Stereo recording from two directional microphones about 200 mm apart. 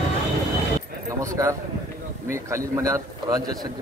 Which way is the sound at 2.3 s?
15° right (ahead or behind).